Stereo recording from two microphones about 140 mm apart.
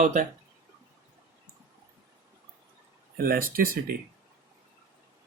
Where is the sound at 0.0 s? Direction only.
65° right (ahead or behind).